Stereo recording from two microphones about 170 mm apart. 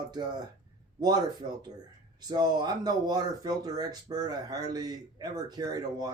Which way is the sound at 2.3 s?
25° right (ahead or behind).